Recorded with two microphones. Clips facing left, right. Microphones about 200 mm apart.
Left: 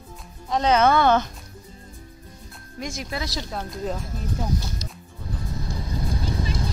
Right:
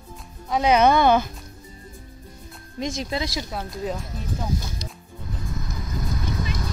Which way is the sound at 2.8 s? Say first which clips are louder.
Right 4 dB; 25° right (ahead or behind).